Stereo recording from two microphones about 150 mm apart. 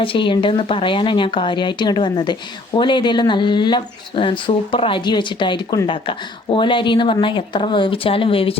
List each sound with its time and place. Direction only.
0.0 s speech: 35° left (ahead or behind)